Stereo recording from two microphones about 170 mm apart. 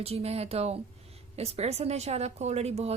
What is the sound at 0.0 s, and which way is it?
A woman's voice, 35° right (ahead or behind).